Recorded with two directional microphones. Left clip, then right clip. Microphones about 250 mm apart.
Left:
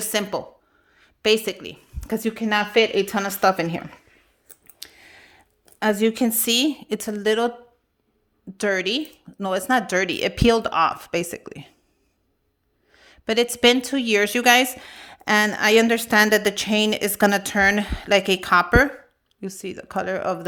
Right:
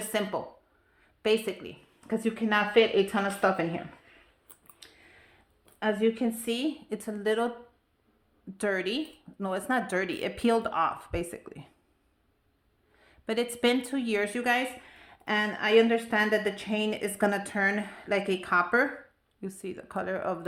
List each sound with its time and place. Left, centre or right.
0.1 s a woman's voice: left
4.8 s a sound: left
5.8 s a woman's voice: left
8.5 s a woman's voice: left
12.9 s a woman's voice: left